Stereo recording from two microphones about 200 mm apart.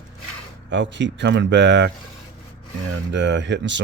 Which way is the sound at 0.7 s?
65° right (ahead or behind).